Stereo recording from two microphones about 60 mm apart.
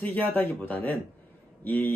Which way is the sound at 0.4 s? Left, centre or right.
Left.